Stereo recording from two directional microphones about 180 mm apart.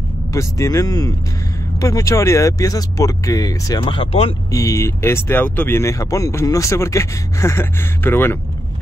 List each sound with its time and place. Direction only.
0.3 s speech: 20° left (ahead or behind)
4.5 s speech: 20° left (ahead or behind)